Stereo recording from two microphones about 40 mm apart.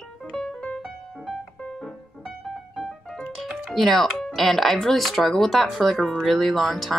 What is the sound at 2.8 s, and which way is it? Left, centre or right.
Music, centre.